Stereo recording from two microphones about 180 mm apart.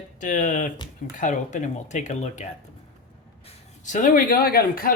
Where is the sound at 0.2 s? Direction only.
45° left (ahead or behind).